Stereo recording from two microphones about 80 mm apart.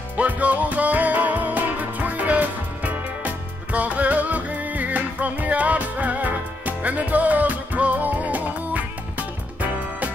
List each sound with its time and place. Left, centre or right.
0.2 s music: centre